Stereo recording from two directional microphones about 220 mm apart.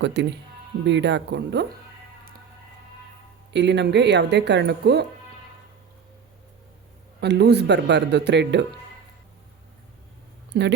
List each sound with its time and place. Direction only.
0.0 s speech: 50° right (ahead or behind)
3.5 s speech: 50° right (ahead or behind)
7.2 s speech: 50° right (ahead or behind)
10.5 s speech: 50° right (ahead or behind)